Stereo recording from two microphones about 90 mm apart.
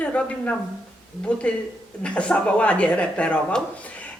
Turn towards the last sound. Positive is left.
turn(degrees=15)  # may be behind; listen again after turning